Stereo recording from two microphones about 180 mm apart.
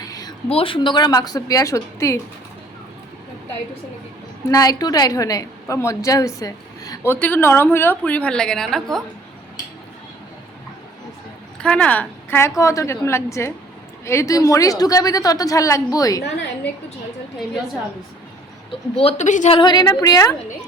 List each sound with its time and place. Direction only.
0.0 s a sound: 20° left (ahead or behind)
0.4 s a woman's voice: 30° left (ahead or behind)
4.4 s a woman's voice: 20° left (ahead or behind); by 9.0 s centre (ahead or behind)
11.6 s a woman's voice: 5° left (ahead or behind)
18.7 s a woman's voice: 30° left (ahead or behind)
19.5 s a woman's voice: 25° left (ahead or behind)